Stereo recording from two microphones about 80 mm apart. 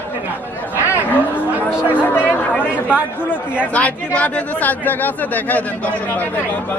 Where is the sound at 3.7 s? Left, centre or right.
Centre.